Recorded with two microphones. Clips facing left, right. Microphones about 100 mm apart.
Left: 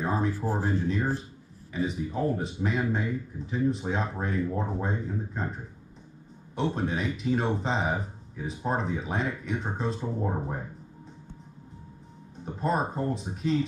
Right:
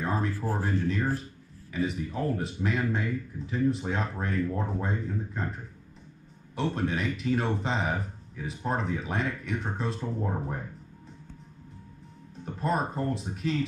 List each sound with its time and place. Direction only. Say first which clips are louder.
0.0 s speech: left 2 dB; 5° left (ahead or behind)
0.3 s speech: left 2 dB; 20° left (ahead or behind)
0.6 s speech: left 1 dB; 5° left (ahead or behind)
10.0 s speech: left 1 dB; 10° left (ahead or behind)
12.4 s speech: left 1 dB; centre (ahead or behind)